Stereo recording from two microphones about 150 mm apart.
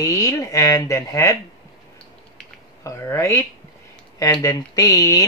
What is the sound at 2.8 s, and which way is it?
Speech, 20° left (ahead or behind).